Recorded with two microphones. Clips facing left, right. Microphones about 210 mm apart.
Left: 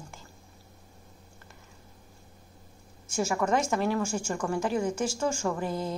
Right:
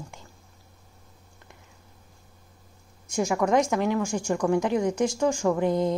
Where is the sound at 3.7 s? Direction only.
15° right (ahead or behind).